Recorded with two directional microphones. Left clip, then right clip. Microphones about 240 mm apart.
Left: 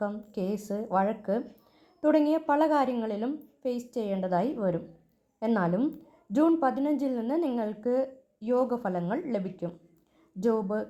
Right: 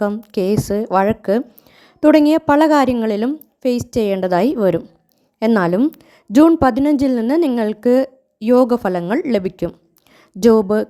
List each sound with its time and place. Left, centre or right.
0.0 s a woman's voice: right